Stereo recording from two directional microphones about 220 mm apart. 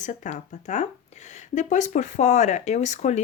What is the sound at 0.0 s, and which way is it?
Speech, 35° left (ahead or behind).